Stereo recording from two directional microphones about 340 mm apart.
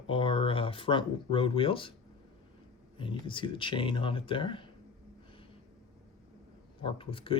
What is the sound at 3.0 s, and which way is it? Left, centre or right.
Speech, centre.